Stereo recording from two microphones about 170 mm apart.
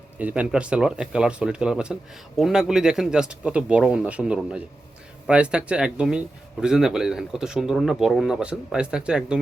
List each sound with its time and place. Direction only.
0.2 s speech: 10° right (ahead or behind)